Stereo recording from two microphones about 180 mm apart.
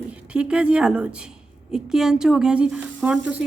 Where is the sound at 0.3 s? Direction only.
5° right (ahead or behind).